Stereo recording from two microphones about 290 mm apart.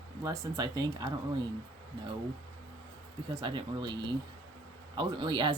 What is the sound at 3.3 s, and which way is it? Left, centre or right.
Speech, centre.